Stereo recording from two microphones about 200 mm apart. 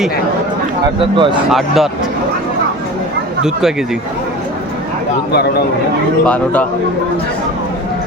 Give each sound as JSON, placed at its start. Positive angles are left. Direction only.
{"t": 0.9, "sound": "speech", "side_deg": -25}
{"t": 1.5, "sound": "speech", "side_deg": 0}
{"t": 6.2, "sound": "a man's voice", "side_deg": 5}